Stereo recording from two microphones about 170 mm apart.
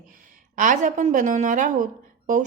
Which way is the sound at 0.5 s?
50° right (ahead or behind).